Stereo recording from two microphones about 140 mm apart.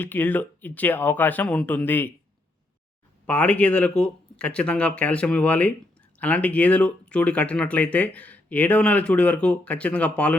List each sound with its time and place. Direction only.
0.0 s speech: 15° left (ahead or behind)
3.2 s speech: 10° left (ahead or behind)